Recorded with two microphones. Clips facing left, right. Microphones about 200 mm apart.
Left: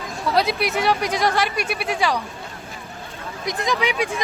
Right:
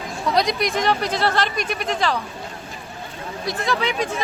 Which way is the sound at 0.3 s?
5° left (ahead or behind).